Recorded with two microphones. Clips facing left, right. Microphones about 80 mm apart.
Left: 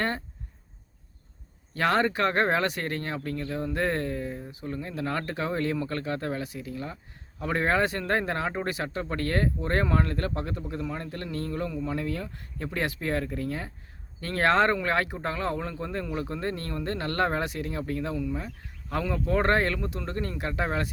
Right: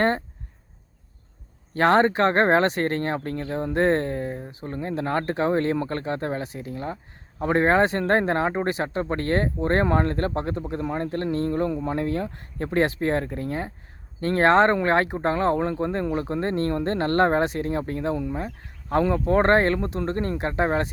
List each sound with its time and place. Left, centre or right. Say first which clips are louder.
1.7 s speech: right 6 dB; right